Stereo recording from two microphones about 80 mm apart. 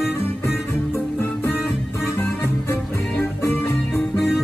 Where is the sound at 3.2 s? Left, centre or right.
Left.